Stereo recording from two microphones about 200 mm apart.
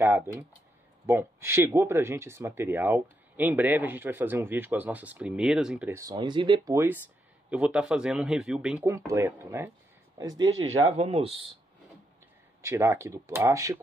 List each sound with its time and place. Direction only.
1.0 s speech: 10° right (ahead or behind)
8.8 s speech: 15° right (ahead or behind)
12.6 s speech: 15° right (ahead or behind)